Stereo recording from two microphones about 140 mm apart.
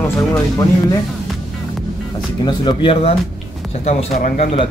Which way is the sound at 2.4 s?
35° left (ahead or behind).